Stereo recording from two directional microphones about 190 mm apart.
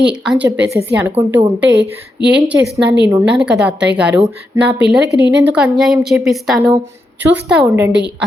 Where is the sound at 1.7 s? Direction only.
65° right (ahead or behind).